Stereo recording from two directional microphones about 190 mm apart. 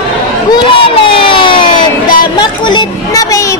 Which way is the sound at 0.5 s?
25° left (ahead or behind).